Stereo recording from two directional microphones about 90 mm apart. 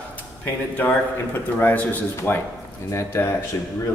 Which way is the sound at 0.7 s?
20° left (ahead or behind).